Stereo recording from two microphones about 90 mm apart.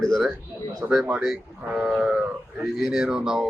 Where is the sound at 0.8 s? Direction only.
10° right (ahead or behind).